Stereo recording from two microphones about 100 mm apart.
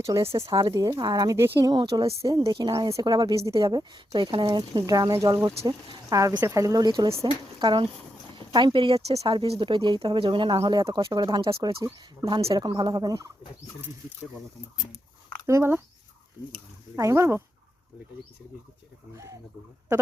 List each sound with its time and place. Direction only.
0.0 s speech: 30° right (ahead or behind)
2.5 s speech: 45° right (ahead or behind)
3.6 s speech: 45° right (ahead or behind)
4.5 s speech: 45° right (ahead or behind)
6.8 s speech: 45° right (ahead or behind)
15.4 s speech: 25° right (ahead or behind)
16.9 s speech: 30° right (ahead or behind)
19.1 s speech: 30° right (ahead or behind)